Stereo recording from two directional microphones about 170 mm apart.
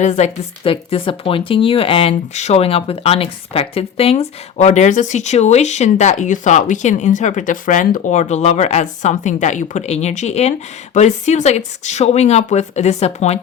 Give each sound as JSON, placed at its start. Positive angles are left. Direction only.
{"t": 0.0, "sound": "speech", "side_deg": 45}